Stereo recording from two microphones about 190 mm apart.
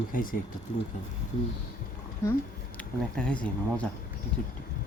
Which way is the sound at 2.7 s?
5° left (ahead or behind).